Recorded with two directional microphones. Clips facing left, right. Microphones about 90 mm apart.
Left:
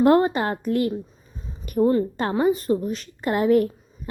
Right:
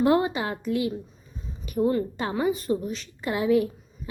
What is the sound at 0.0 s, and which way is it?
A woman's voice, 45° left (ahead or behind).